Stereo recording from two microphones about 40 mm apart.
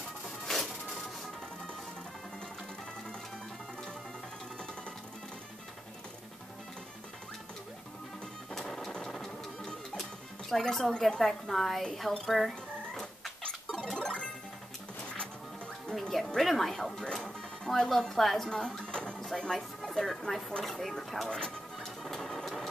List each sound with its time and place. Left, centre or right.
0.5 s music: centre
8.5 s music: centre
10.5 s speech: centre
12.3 s frog: centre
13.7 s music: centre
15.9 s music: centre
16.3 s speech: centre
16.9 s speech: centre
18.5 s a sound: centre
19.3 s speech: centre
21.3 s speech: left
21.7 s music: centre